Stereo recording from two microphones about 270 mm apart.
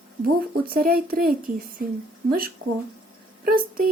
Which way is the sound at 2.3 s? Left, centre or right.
Right.